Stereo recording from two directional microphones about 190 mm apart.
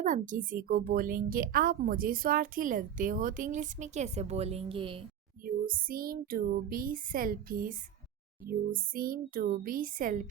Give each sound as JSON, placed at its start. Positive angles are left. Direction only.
{"t": 0.0, "sound": "a woman's voice", "side_deg": -45}
{"t": 5.5, "sound": "a woman's voice", "side_deg": -50}